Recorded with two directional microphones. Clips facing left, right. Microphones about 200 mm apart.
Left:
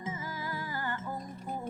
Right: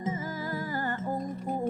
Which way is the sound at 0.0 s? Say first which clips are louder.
Right 6 dB; 40° right (ahead or behind).